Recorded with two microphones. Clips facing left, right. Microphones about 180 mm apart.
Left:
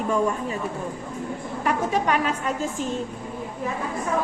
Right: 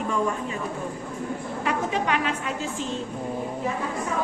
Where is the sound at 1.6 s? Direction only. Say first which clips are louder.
Left 3 dB; 45° left (ahead or behind).